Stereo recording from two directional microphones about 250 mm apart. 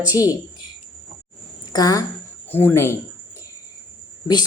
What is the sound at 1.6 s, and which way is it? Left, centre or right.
A woman's voice, centre.